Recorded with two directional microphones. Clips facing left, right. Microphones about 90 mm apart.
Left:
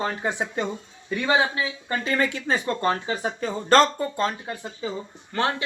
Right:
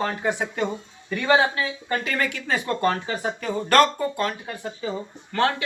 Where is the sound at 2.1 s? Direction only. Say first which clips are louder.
Left 5 dB; 30° left (ahead or behind).